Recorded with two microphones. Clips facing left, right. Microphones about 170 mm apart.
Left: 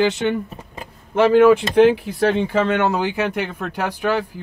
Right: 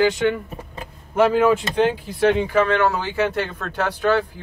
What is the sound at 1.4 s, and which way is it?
Speech, 70° left (ahead or behind).